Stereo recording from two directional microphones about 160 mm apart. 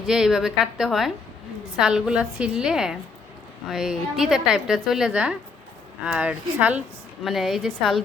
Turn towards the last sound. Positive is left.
turn(degrees=0)  # may be behind; listen again after turning